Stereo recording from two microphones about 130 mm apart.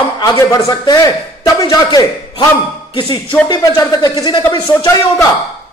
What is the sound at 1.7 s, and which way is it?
A man's voice, 30° left (ahead or behind).